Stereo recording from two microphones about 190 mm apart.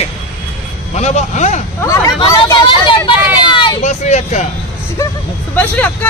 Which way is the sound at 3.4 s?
25° left (ahead or behind).